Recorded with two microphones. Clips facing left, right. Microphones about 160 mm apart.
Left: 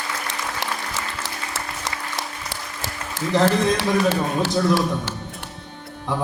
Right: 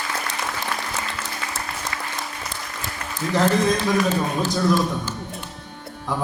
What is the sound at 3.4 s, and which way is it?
A man's voice, 85° left.